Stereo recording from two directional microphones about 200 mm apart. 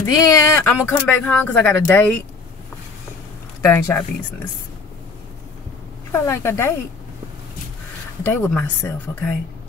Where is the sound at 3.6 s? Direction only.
10° left (ahead or behind).